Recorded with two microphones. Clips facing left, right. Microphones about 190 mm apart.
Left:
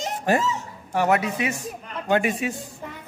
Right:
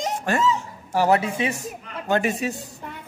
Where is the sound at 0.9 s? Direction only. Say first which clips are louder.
Right 2 dB; 30° right (ahead or behind).